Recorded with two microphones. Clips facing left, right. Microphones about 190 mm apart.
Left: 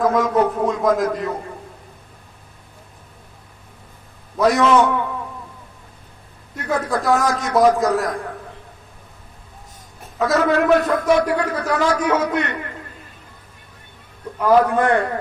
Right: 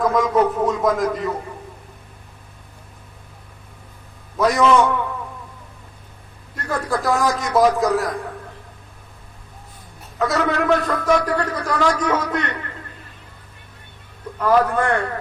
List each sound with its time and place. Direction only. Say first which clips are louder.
0.0 s speech: even; centre (ahead or behind)
4.4 s a man's voice: left 1 dB; centre (ahead or behind)
6.7 s a man's voice: left 2 dB; centre (ahead or behind)
10.2 s a man's voice: left 3 dB; centre (ahead or behind)
14.3 s a man's voice: left 2 dB; 15° left (ahead or behind)